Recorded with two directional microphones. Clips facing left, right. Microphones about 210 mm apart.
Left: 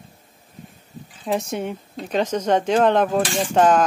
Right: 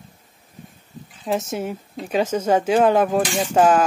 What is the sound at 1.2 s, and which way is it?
Speech, centre (ahead or behind).